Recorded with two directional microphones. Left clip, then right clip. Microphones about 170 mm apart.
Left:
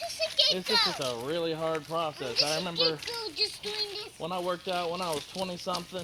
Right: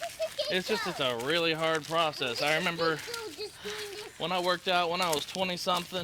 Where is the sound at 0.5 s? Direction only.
35° right (ahead or behind).